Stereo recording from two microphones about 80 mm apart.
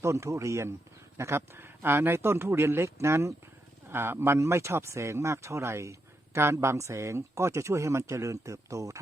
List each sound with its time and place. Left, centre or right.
0.0 s speech: right